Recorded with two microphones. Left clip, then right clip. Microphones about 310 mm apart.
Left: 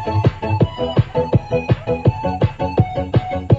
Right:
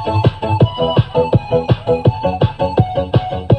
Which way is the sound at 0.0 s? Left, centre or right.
Right.